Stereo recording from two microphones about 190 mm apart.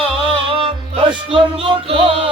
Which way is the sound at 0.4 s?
30° right (ahead or behind).